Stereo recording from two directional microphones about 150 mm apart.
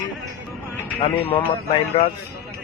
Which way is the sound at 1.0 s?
35° left (ahead or behind).